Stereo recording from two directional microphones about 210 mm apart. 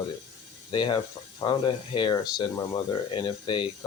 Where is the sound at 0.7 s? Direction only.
20° left (ahead or behind).